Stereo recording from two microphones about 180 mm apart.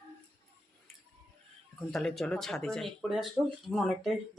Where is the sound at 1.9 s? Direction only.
5° left (ahead or behind).